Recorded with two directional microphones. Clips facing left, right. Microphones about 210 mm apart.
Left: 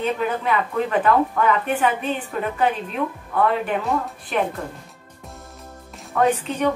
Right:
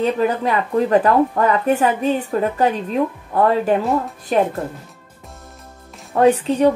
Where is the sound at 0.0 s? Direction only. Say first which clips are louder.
Right 5 dB; 35° right (ahead or behind).